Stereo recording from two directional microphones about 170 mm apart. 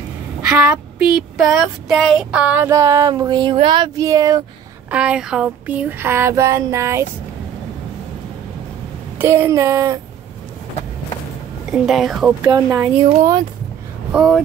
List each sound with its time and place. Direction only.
0.4 s child singing: 5° right (ahead or behind); by 3.5 s 25° right (ahead or behind)
3.5 s speech: 30° right (ahead or behind)
4.9 s child singing: 5° right (ahead or behind)
9.2 s child singing: 15° right (ahead or behind)
11.7 s speech: centre (ahead or behind)
12.4 s child singing: 10° right (ahead or behind)
14.1 s speech: centre (ahead or behind)